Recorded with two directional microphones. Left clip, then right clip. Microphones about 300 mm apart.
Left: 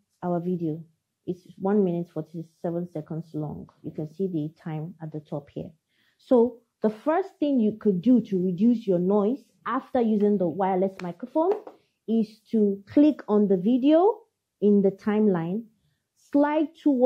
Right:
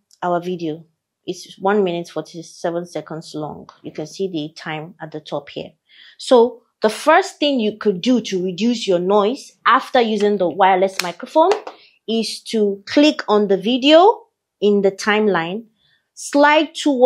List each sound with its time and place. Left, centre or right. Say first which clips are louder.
0.2 s speech: right 8 dB; centre
3.9 s a woman's voice: right 6 dB; centre